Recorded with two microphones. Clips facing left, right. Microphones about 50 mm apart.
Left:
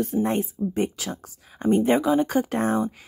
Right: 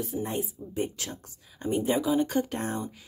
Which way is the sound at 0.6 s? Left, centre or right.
Left.